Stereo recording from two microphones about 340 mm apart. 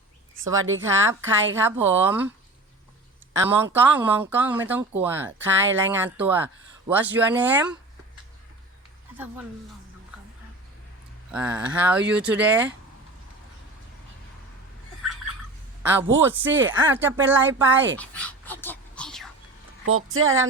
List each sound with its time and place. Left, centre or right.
0.5 s speech: right
1.2 s a woman's voice: centre
3.5 s speech: centre
9.1 s speech: centre
11.3 s speech: centre
15.8 s a woman's voice: centre
18.0 s a sound: centre
19.8 s speech: right